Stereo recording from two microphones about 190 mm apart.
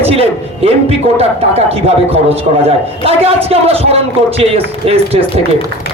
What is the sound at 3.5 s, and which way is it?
A man's voice, 30° right (ahead or behind).